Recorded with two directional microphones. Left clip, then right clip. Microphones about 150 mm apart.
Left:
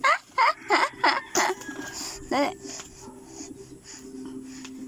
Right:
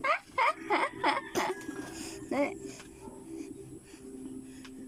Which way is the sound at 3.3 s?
30° right (ahead or behind).